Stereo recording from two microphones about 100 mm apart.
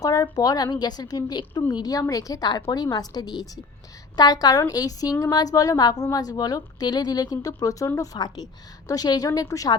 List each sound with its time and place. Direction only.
0.0 s a woman's voice: 35° left (ahead or behind)